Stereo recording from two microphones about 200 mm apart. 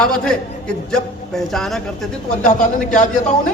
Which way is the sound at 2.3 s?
35° left (ahead or behind).